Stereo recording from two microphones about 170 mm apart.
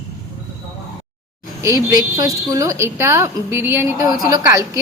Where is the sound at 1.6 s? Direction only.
20° right (ahead or behind).